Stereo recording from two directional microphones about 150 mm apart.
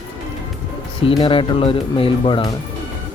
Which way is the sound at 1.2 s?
35° left (ahead or behind).